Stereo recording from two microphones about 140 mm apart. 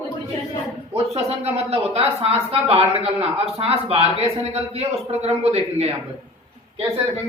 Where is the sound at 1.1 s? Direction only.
45° right (ahead or behind).